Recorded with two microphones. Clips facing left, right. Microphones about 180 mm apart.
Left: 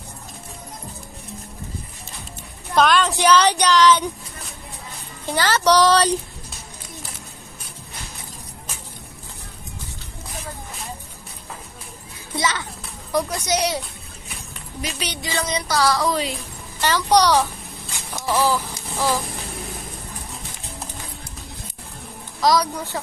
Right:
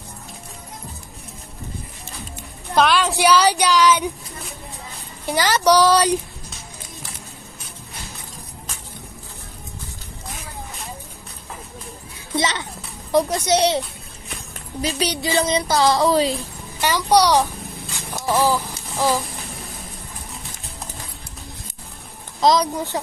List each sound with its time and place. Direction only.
2.7 s speech: centre (ahead or behind)
5.2 s speech: 15° right (ahead or behind)
12.4 s speech: 20° right (ahead or behind)
16.8 s speech: 10° right (ahead or behind)
18.3 s a sound: 15° right (ahead or behind)
22.4 s speech: 20° right (ahead or behind)